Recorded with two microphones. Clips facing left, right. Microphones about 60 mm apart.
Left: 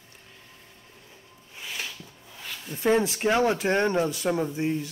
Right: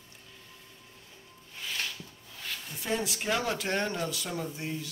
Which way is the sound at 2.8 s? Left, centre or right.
Left.